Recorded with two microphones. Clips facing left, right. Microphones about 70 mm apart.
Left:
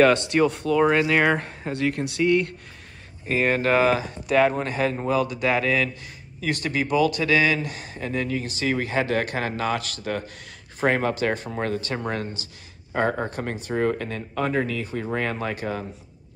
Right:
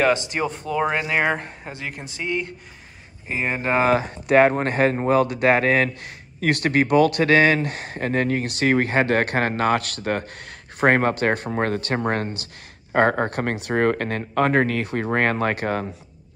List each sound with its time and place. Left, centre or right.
0.0 s speech: centre
3.8 s speech: right